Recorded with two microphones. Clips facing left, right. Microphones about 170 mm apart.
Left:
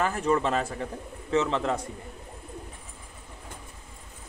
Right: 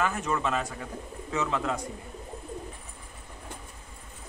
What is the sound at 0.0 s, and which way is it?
Speech, 35° left (ahead or behind).